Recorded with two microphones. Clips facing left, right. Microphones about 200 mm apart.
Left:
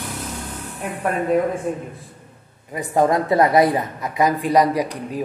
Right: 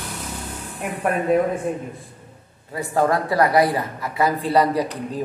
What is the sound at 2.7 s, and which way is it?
Speech, 20° left (ahead or behind).